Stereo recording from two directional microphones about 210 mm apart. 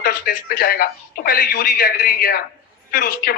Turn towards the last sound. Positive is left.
turn(degrees=45)  # may be behind; listen again after turning